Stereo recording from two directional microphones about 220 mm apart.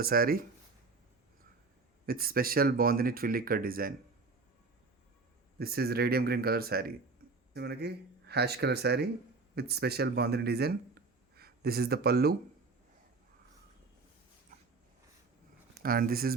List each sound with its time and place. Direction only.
0.0 s speech: 40° right (ahead or behind)
2.0 s speech: 40° right (ahead or behind)
5.5 s speech: 45° right (ahead or behind)
15.8 s speech: 40° right (ahead or behind)